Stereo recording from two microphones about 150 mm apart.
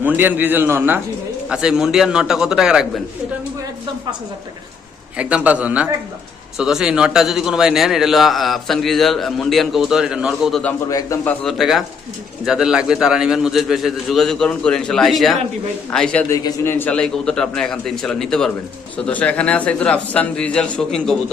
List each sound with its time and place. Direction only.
0.0 s a man's voice: 10° right (ahead or behind)
5.1 s a man's voice: 10° right (ahead or behind)
10.8 s a man's voice: 25° left (ahead or behind)
11.3 s a man's voice: centre (ahead or behind)
16.3 s a man's voice: 25° left (ahead or behind)
16.7 s a man's voice: 10° left (ahead or behind)